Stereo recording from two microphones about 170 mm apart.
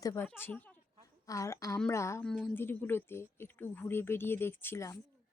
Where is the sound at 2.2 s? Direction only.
5° left (ahead or behind).